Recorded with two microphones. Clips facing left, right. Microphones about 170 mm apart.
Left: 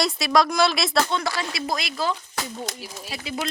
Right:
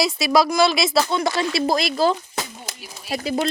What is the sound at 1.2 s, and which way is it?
Speech, 25° right (ahead or behind).